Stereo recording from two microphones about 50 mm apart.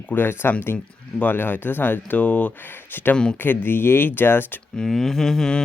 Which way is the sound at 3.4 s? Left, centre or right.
Left.